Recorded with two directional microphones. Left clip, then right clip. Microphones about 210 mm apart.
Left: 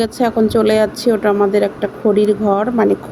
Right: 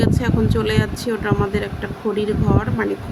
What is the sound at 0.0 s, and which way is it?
Speech, 15° left (ahead or behind).